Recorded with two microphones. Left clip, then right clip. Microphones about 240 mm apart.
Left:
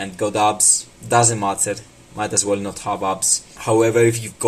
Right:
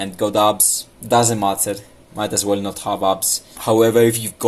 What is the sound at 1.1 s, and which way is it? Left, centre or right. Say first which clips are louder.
Speech: right 1 dB; centre.